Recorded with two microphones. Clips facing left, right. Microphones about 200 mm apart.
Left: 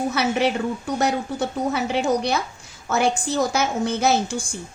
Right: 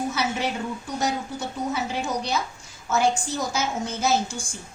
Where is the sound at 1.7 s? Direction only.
65° left (ahead or behind).